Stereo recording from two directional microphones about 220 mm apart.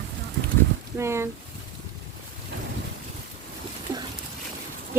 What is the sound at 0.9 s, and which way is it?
Speech, 10° right (ahead or behind).